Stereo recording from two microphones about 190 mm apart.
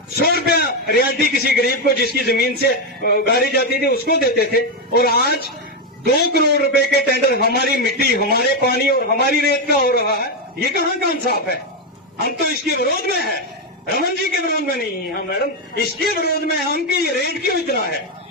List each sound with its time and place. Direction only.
0.4 s a man's voice: 55° left (ahead or behind)